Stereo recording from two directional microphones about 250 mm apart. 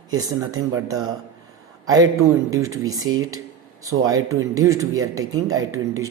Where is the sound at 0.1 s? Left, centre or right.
Centre.